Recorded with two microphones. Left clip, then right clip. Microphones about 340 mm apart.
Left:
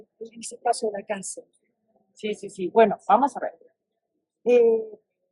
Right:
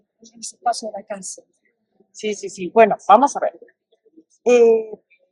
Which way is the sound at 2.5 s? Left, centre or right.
Right.